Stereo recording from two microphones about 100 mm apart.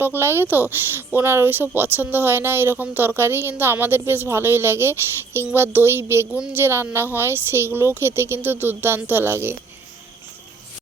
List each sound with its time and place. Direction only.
0.0 s speech: 25° right (ahead or behind)